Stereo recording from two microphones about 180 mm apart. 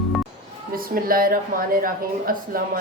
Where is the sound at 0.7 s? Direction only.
55° right (ahead or behind).